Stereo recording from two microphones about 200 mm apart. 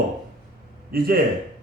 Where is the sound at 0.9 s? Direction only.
50° right (ahead or behind).